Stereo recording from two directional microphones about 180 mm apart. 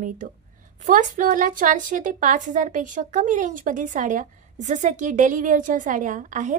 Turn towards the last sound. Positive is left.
turn(degrees=-45)  # may be behind; listen again after turning